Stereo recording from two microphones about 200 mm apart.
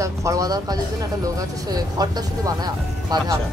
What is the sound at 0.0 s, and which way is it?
Speech, 15° right (ahead or behind).